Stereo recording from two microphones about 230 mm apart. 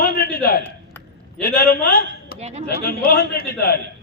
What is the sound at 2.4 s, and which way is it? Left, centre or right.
Speech, right.